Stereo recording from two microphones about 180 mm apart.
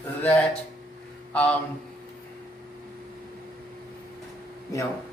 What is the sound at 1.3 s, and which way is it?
Speech, 10° left (ahead or behind).